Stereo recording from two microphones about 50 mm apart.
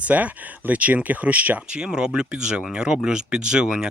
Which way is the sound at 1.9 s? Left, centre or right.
Centre.